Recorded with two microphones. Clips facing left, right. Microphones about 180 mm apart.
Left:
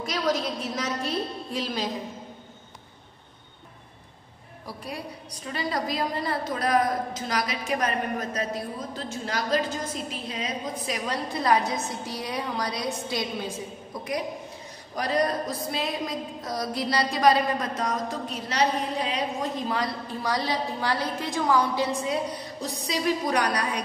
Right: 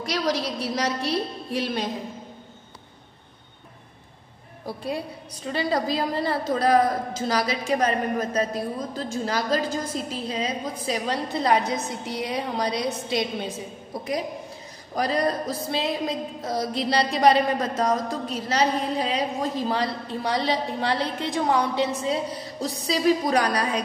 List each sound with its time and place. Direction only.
0.0 s a woman's voice: 75° right (ahead or behind)
5.5 s a woman's voice: 30° right (ahead or behind)
9.2 s music: 35° right (ahead or behind)
13.9 s a woman's voice: 30° right (ahead or behind)
15.0 s music: 30° right (ahead or behind)